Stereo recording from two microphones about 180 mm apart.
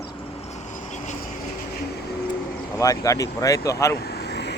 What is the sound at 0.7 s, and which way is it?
Vehicle, 40° left (ahead or behind).